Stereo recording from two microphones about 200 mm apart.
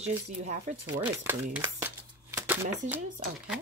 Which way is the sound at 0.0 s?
35° right (ahead or behind).